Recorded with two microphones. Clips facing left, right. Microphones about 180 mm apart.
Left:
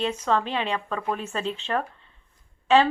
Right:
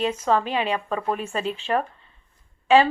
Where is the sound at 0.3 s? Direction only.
10° right (ahead or behind).